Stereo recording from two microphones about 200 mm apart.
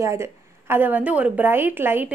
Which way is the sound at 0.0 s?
15° right (ahead or behind).